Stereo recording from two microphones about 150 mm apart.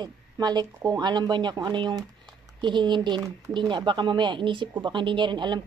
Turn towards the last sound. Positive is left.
turn(degrees=-30)  # may be behind; listen again after turning